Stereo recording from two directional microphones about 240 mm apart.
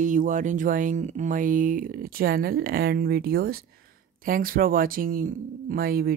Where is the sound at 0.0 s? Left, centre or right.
Right.